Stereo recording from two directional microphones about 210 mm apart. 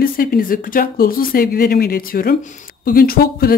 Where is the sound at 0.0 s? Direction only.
45° left (ahead or behind).